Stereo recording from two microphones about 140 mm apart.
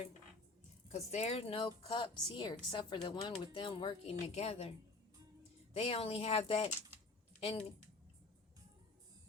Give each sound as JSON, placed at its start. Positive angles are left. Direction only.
{"t": 0.9, "sound": "a woman's voice", "side_deg": 55}
{"t": 5.7, "sound": "speech", "side_deg": 45}